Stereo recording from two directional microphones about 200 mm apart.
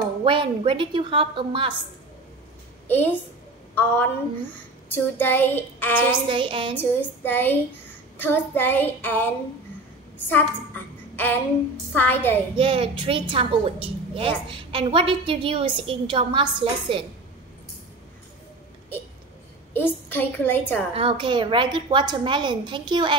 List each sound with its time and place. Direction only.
0.2 s a woman's voice: 25° right (ahead or behind)
2.9 s child singing: 10° left (ahead or behind)
4.8 s child singing: 10° left (ahead or behind)
6.2 s a woman's voice: 25° right (ahead or behind)
6.8 s child singing: 10° left (ahead or behind)
10.1 s a woman's voice: 10° left (ahead or behind)
12.5 s a woman's voice: 25° right (ahead or behind)
19.7 s child singing: 10° left (ahead or behind)
20.9 s a woman's voice: 25° right (ahead or behind)